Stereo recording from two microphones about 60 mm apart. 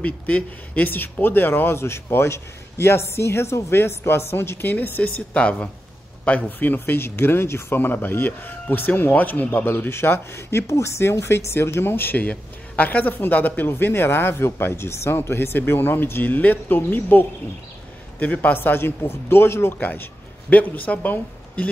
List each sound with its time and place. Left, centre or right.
0.0 s speech: left
5.3 s speech: centre
18.2 s speech: left
19.9 s a man's voice: left